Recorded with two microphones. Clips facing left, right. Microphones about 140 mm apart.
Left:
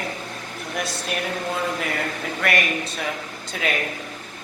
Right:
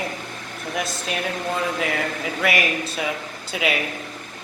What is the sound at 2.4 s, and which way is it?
Speech, 5° right (ahead or behind).